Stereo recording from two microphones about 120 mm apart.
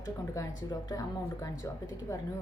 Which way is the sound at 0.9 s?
30° left (ahead or behind).